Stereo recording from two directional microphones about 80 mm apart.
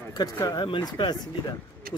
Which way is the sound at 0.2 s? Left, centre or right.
Left.